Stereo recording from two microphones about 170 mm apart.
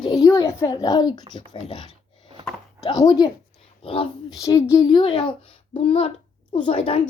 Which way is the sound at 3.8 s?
35° left (ahead or behind).